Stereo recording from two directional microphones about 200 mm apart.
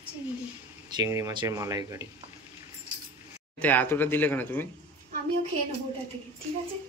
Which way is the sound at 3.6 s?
10° left (ahead or behind).